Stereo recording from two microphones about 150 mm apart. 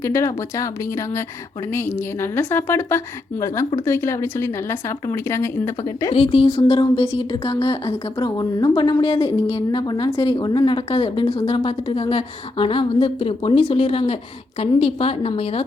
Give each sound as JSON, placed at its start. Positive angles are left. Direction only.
{"t": 0.0, "sound": "speech", "side_deg": 20}
{"t": 6.1, "sound": "a woman's voice", "side_deg": 35}